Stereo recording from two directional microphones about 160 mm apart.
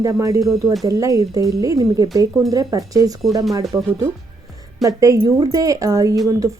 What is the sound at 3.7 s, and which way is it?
Speech, 10° right (ahead or behind).